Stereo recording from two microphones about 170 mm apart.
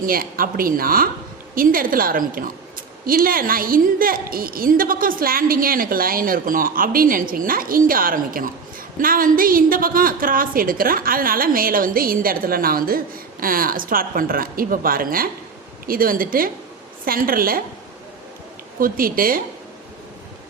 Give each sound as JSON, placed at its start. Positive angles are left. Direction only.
{"t": 0.0, "sound": "a woman's voice", "side_deg": -60}
{"t": 18.8, "sound": "a woman's voice", "side_deg": -55}